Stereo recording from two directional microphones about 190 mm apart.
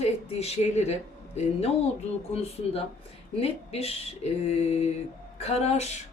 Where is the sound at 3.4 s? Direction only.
30° left (ahead or behind).